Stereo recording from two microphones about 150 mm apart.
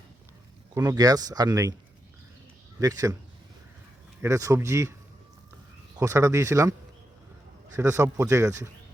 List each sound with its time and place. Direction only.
0.7 s speech: 25° right (ahead or behind)
2.8 s speech: 25° right (ahead or behind)
4.2 s speech: 20° right (ahead or behind)
6.0 s speech: 20° right (ahead or behind)
7.8 s speech: 20° right (ahead or behind)